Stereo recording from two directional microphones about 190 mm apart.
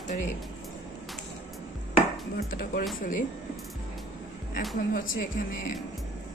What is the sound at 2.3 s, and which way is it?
Speech, 50° left (ahead or behind).